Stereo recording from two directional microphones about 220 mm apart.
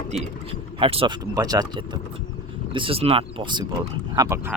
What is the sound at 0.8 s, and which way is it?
Speech, 25° right (ahead or behind).